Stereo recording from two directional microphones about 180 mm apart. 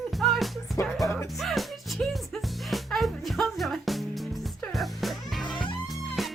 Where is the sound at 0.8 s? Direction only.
15° left (ahead or behind).